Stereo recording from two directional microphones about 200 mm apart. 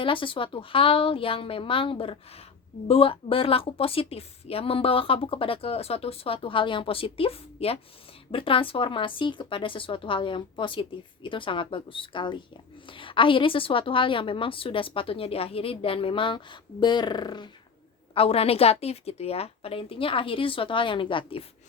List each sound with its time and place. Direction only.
0.0 s a woman's voice: 25° left (ahead or behind)